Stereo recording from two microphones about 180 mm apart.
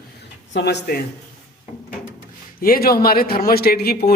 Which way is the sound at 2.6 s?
55° left (ahead or behind).